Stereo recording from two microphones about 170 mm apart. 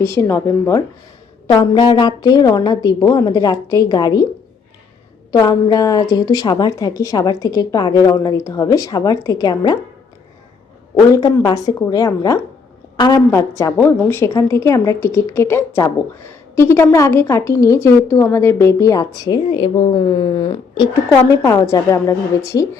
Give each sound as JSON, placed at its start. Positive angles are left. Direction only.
{"t": 0.0, "sound": "a woman's voice", "side_deg": 15}
{"t": 1.5, "sound": "a woman's voice", "side_deg": 25}
{"t": 5.3, "sound": "a woman's voice", "side_deg": 20}
{"t": 11.1, "sound": "a woman's voice", "side_deg": 20}